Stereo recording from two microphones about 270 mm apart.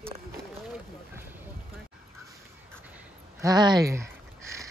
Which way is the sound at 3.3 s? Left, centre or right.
Centre.